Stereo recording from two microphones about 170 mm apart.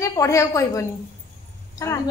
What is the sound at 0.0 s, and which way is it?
A woman's voice, 20° left (ahead or behind).